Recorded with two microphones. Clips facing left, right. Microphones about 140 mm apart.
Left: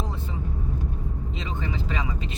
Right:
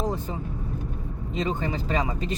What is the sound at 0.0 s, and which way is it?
Vehicle, 40° right (ahead or behind).